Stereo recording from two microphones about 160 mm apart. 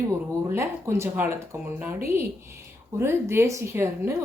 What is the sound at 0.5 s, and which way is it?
Speech, 15° right (ahead or behind).